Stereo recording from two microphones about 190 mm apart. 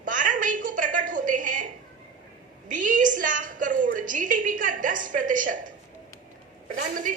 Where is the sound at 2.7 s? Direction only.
45° right (ahead or behind).